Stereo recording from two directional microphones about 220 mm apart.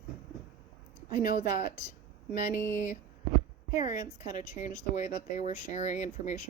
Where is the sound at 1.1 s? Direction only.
40° left (ahead or behind).